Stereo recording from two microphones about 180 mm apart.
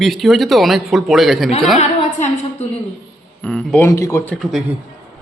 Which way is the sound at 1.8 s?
40° left (ahead or behind).